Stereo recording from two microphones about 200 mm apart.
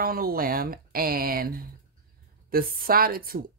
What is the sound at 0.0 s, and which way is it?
A woman's voice, 45° right (ahead or behind).